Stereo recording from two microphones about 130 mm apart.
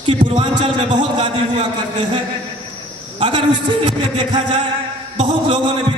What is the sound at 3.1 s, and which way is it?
Speech, 40° right (ahead or behind).